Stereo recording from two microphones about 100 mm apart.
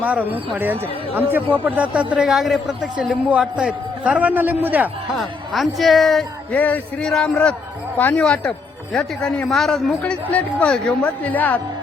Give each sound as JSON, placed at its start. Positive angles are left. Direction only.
{"t": 0.0, "sound": "speech", "side_deg": -15}
{"t": 5.1, "sound": "speech", "side_deg": 0}
{"t": 6.5, "sound": "speech", "side_deg": 15}